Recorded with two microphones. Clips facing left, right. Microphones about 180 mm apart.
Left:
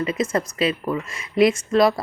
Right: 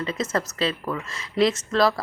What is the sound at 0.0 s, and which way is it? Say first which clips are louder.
Speech: left 4 dB; 10° left (ahead or behind).